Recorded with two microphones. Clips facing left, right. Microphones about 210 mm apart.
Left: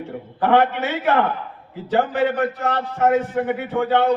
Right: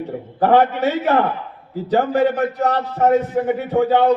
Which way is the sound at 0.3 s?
40° right (ahead or behind).